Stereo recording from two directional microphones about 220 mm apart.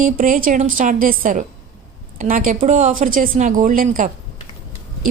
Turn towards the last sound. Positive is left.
turn(degrees=-40)  # may be behind; listen again after turning